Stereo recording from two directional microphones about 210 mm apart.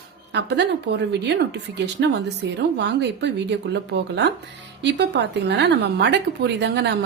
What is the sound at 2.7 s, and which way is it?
A woman's voice, 55° right (ahead or behind).